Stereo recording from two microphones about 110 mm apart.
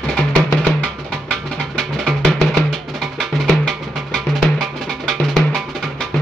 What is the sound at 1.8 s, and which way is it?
Music, 5° left (ahead or behind).